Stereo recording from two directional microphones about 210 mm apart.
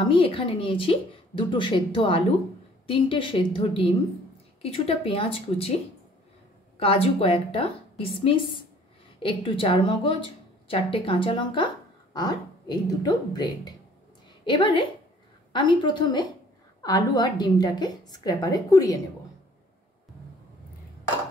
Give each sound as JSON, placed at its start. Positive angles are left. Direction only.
{"t": 0.0, "sound": "speech", "side_deg": 25}
{"t": 6.8, "sound": "a woman's voice", "side_deg": 25}